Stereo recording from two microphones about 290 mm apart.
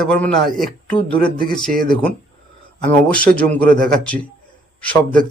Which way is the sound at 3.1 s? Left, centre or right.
Centre.